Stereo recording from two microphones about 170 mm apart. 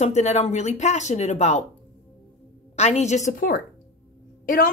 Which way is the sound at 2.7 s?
40° left (ahead or behind).